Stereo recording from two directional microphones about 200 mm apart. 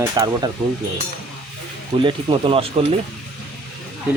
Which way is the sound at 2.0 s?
25° right (ahead or behind).